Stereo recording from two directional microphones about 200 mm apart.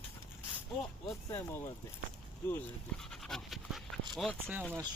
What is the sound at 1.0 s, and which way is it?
Speech, 15° left (ahead or behind).